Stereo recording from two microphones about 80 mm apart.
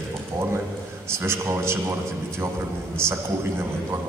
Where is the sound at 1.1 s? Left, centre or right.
Right.